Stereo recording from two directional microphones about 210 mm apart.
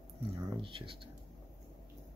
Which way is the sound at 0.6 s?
25° right (ahead or behind).